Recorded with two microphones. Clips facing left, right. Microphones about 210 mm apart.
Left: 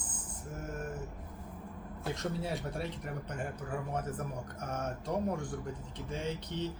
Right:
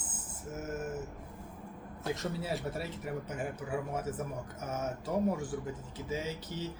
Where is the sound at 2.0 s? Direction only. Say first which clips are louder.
Right 1 dB; centre (ahead or behind).